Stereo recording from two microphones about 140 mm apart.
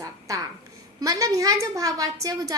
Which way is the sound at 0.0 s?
25° right (ahead or behind).